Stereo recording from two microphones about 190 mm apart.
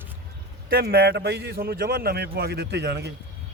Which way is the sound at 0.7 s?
55° right (ahead or behind).